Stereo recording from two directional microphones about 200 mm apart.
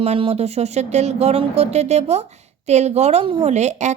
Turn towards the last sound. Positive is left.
turn(degrees=-35)  # may be behind; listen again after turning